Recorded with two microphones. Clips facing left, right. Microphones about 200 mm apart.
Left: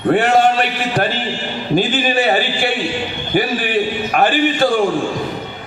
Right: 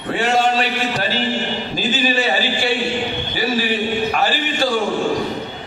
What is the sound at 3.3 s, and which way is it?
A man's voice, 55° left (ahead or behind).